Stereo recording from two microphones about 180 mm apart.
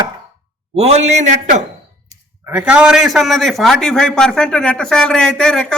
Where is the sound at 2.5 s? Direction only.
5° right (ahead or behind).